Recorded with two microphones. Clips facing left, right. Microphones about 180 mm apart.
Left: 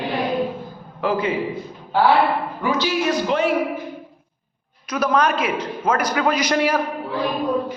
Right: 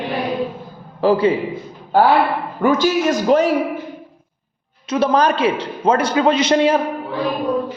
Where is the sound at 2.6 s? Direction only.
45° right (ahead or behind).